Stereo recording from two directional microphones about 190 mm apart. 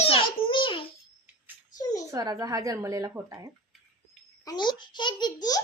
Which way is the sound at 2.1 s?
20° right (ahead or behind).